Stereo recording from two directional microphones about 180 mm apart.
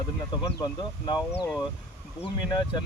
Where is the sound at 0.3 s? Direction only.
25° left (ahead or behind).